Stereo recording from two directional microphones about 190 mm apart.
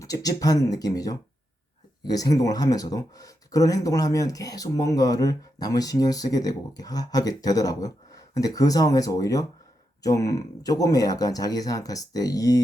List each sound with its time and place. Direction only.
0.0 s speech: 20° left (ahead or behind)